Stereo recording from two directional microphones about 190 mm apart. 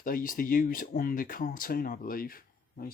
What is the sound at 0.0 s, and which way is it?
Speech, 45° left (ahead or behind).